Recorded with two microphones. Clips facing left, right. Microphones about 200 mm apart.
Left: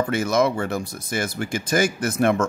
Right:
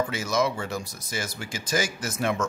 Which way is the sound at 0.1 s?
55° left (ahead or behind).